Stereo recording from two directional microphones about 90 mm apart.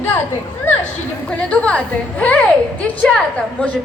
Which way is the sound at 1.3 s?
10° left (ahead or behind).